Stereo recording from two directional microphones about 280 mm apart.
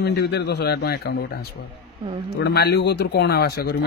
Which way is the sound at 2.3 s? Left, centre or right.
Left.